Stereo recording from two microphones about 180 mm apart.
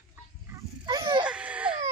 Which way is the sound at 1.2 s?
5° right (ahead or behind).